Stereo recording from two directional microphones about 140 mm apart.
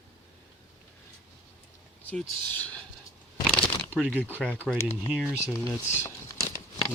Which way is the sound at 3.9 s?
10° right (ahead or behind).